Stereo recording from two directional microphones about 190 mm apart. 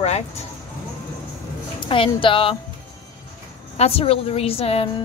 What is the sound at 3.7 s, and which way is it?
A woman's voice, 30° left (ahead or behind).